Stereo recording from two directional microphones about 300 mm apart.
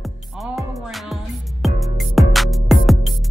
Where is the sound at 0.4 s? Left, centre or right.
Centre.